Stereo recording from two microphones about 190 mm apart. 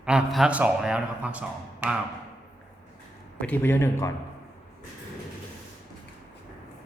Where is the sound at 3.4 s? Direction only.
10° left (ahead or behind).